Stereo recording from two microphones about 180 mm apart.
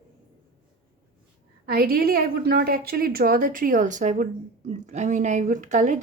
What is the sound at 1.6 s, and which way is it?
A woman's voice, 55° right (ahead or behind).